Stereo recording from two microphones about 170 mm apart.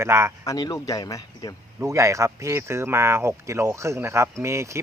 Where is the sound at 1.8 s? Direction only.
15° right (ahead or behind).